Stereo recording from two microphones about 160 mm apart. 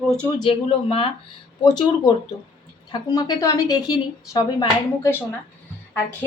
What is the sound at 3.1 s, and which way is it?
Speech, 20° left (ahead or behind).